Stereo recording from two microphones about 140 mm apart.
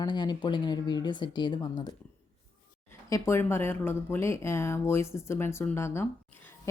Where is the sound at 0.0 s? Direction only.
30° left (ahead or behind).